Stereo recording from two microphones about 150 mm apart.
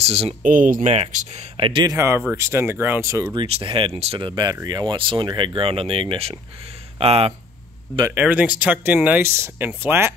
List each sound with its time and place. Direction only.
0.0 s speech: 45° right (ahead or behind)
0.4 s speech: 60° right (ahead or behind)
0.9 s speech: 45° right (ahead or behind)
2.0 s speech: 15° right (ahead or behind)
3.3 s speech: 40° right (ahead or behind)
8.1 s speech: 10° right (ahead or behind)